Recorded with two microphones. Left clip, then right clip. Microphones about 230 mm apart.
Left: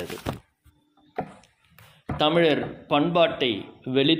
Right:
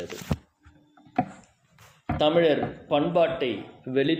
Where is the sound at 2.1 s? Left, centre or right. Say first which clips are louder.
Even; left.